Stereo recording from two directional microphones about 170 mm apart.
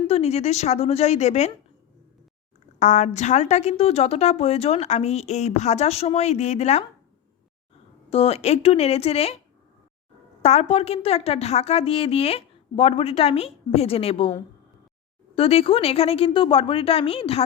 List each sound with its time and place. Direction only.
0.1 s a woman's voice: 40° left (ahead or behind)
2.7 s a woman's voice: 45° left (ahead or behind)
8.1 s a woman's voice: 40° left (ahead or behind)
10.4 s a woman's voice: 40° left (ahead or behind)